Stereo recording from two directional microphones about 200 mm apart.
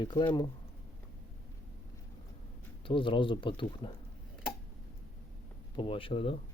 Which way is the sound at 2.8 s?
25° left (ahead or behind).